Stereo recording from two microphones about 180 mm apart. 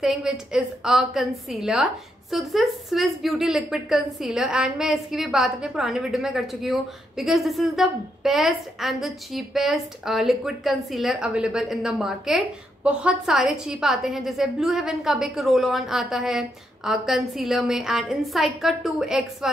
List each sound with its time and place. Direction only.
0.0 s a woman's voice: centre (ahead or behind)